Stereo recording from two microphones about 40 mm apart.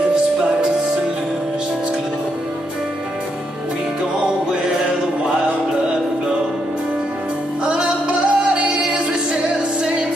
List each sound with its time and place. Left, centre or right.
7.6 s music: right